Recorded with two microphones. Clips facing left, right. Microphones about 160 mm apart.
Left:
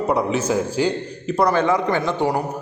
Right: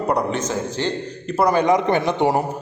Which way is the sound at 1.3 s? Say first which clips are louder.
Right 1 dB; 10° right (ahead or behind).